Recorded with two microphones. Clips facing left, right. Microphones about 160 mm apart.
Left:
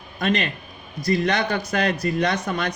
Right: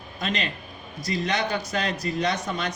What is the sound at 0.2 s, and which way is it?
A man's voice, 60° left (ahead or behind).